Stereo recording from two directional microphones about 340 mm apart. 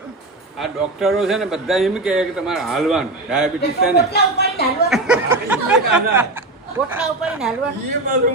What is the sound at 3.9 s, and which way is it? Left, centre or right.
Speech, left.